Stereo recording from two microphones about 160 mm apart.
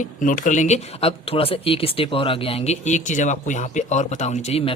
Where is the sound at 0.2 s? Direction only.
55° left (ahead or behind).